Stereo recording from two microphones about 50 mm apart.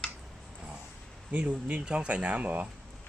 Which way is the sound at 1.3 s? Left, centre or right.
Right.